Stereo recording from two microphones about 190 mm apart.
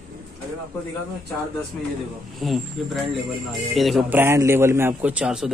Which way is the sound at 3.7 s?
Centre (ahead or behind).